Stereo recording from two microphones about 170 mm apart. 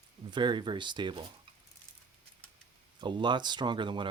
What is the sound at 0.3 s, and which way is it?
Speech, 25° right (ahead or behind).